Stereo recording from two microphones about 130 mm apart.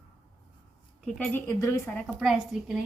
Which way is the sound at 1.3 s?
20° left (ahead or behind).